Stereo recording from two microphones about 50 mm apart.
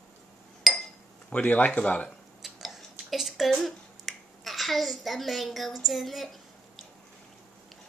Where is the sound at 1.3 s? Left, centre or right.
Left.